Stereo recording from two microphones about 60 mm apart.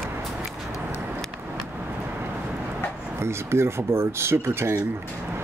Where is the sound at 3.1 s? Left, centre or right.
Right.